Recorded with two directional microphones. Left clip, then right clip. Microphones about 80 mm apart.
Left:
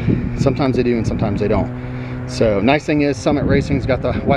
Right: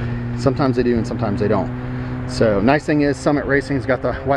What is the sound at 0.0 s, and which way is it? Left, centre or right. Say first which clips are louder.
Speech: left 2 dB; centre.